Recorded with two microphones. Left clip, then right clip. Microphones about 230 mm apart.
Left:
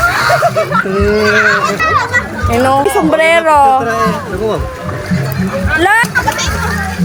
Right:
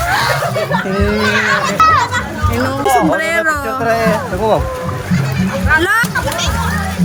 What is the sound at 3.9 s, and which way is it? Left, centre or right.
Speech, centre.